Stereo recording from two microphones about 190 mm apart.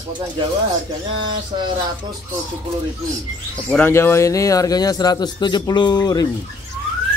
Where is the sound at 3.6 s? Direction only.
10° left (ahead or behind).